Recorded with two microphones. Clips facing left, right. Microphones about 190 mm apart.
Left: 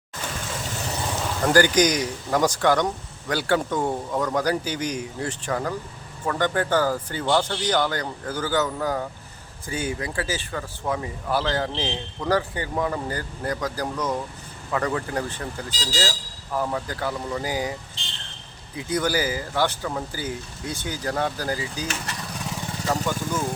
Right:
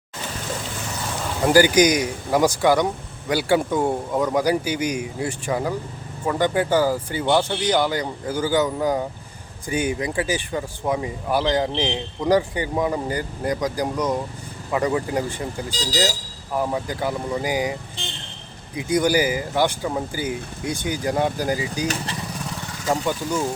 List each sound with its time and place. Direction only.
1.4 s speech: 10° right (ahead or behind)
18.8 s speech: 15° right (ahead or behind)
22.9 s speech: 10° right (ahead or behind)